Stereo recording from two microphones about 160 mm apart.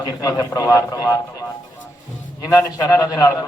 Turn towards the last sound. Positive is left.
turn(degrees=20)  # may be behind; listen again after turning